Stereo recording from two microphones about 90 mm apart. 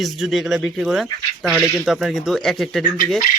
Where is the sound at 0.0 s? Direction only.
Centre (ahead or behind).